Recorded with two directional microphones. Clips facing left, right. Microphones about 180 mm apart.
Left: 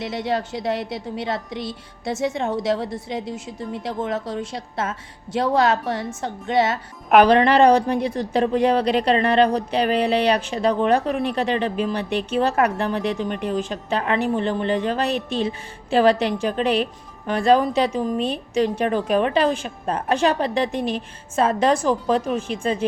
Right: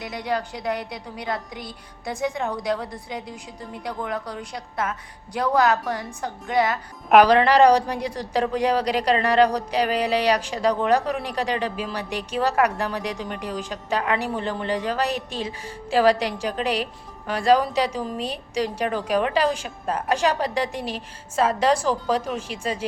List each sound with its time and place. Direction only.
0.0 s a woman's voice: 25° left (ahead or behind)